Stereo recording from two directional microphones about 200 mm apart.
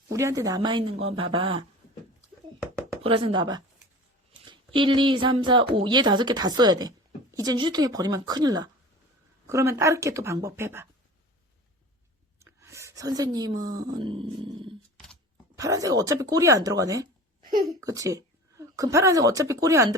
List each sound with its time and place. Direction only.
0.1 s speech: 15° right (ahead or behind)
3.0 s speech: 30° right (ahead or behind); by 10.8 s 10° right (ahead or behind)
12.4 s speech: 15° right (ahead or behind)
14.9 s a sound: 5° left (ahead or behind)
15.5 s speech: 15° right (ahead or behind)